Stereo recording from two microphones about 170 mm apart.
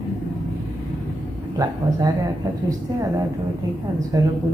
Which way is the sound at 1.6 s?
20° right (ahead or behind).